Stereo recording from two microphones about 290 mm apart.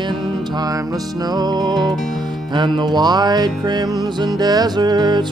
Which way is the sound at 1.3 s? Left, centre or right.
Centre.